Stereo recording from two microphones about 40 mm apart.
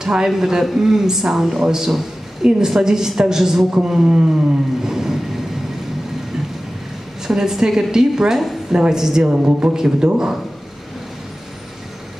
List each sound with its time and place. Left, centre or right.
0.0 s a woman's voice: centre
7.2 s a woman's voice: centre
9.3 s speech: right
9.8 s a woman's voice: centre